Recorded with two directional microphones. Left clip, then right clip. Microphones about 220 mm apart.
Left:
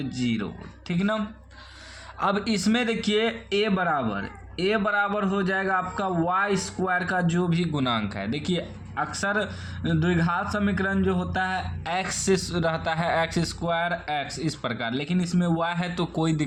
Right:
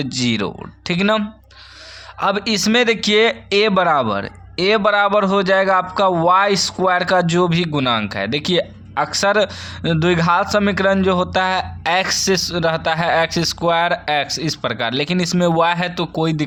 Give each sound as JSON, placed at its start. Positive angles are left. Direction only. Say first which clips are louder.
{"t": 0.0, "sound": "speech", "louder": "right 10 dB", "side_deg": -35}
{"t": 2.1, "sound": "speech", "louder": "right 7 dB", "side_deg": -20}